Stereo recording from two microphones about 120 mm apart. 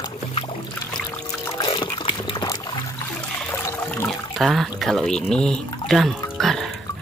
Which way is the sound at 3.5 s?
15° left (ahead or behind).